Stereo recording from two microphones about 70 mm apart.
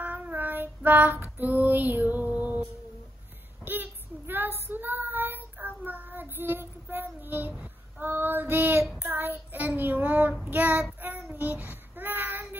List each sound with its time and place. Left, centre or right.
0.0 s child singing: right
3.6 s child singing: right